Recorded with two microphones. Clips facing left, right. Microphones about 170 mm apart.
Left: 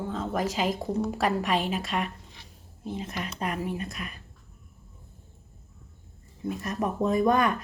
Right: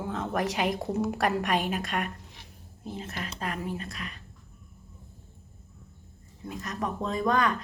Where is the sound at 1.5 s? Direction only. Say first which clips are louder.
Left 1 dB; 50° right (ahead or behind).